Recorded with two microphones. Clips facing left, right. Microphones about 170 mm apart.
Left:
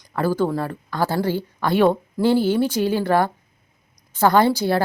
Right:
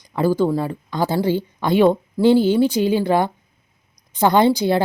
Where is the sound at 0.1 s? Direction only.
15° right (ahead or behind).